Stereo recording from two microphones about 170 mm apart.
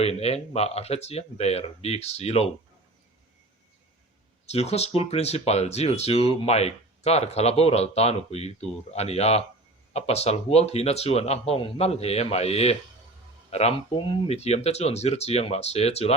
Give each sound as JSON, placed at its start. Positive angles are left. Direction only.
{"t": 0.0, "sound": "speech", "side_deg": 40}
{"t": 4.4, "sound": "speech", "side_deg": 40}